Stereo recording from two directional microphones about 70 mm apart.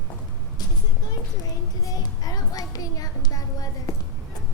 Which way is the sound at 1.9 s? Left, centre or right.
Left.